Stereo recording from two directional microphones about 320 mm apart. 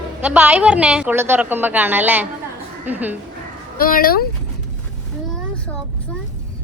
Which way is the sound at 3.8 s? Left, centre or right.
Left.